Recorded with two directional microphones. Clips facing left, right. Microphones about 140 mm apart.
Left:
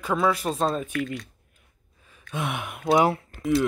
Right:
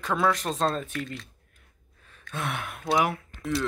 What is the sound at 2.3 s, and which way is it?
Speech, 15° left (ahead or behind).